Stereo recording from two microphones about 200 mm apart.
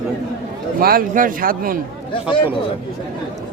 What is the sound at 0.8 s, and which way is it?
Speech, 45° right (ahead or behind).